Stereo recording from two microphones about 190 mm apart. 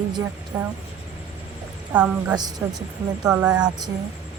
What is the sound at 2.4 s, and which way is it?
Speech, 20° right (ahead or behind).